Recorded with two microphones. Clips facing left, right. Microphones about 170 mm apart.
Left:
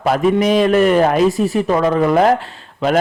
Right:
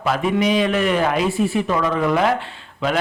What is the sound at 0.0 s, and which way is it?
A man's voice, 45° left (ahead or behind).